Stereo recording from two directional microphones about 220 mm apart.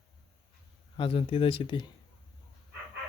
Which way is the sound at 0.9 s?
25° left (ahead or behind).